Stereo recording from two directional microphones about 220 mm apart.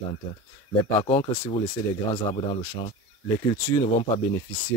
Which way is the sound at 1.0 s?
20° left (ahead or behind).